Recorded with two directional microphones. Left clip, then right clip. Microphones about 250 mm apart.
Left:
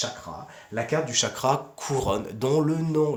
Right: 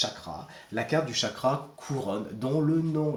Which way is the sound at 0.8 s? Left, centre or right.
Left.